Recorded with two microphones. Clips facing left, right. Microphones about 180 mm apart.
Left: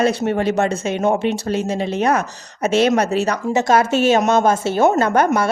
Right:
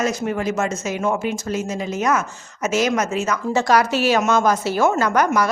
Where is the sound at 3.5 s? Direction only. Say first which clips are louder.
Left 1 dB; 20° left (ahead or behind).